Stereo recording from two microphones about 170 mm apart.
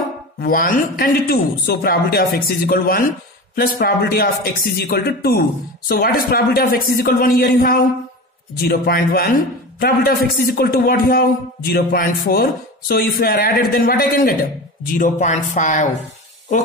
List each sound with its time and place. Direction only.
0.4 s a man's voice: 55° left (ahead or behind)
15.0 s speech: 45° left (ahead or behind)